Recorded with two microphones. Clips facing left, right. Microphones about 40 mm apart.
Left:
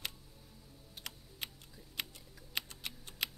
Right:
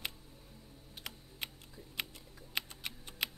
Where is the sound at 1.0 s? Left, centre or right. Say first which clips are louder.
Right 1 dB; centre.